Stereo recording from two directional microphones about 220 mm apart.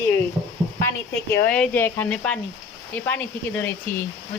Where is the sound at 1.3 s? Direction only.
10° left (ahead or behind).